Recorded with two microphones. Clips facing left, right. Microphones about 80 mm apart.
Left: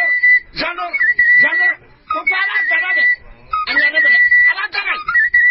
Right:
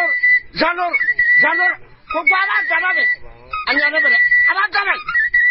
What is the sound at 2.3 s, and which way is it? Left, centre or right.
Speech, right.